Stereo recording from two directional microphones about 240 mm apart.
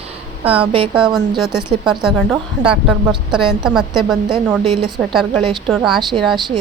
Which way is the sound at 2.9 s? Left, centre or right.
Centre.